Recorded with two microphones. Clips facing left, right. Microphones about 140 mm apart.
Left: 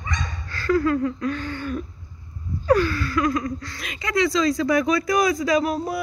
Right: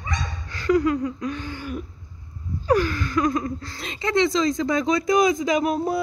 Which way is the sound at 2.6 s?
10° right (ahead or behind).